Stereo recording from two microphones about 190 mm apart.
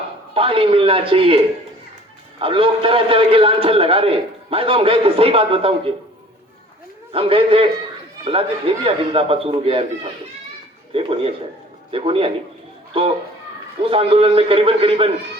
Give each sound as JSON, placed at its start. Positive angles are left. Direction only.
{"t": 0.3, "sound": "a man's voice", "side_deg": -30}
{"t": 2.4, "sound": "a man's voice", "side_deg": -30}
{"t": 7.1, "sound": "a man's voice", "side_deg": -30}
{"t": 13.8, "sound": "a man's voice", "side_deg": -30}